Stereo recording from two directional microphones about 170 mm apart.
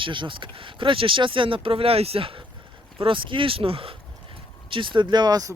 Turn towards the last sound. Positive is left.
turn(degrees=-20)  # may be behind; listen again after turning